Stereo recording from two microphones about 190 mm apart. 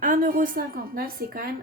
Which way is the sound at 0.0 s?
45° right (ahead or behind).